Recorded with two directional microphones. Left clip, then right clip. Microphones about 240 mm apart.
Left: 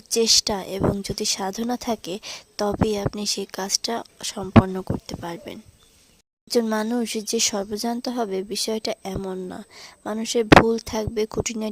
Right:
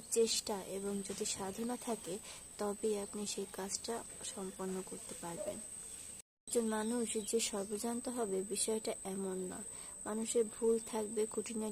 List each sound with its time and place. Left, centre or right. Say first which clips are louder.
0.1 s speech: left 15 dB; left